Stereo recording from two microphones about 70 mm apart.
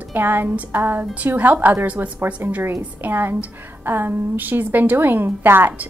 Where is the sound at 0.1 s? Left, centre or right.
Right.